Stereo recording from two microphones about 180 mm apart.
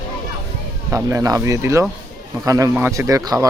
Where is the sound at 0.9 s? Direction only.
15° right (ahead or behind).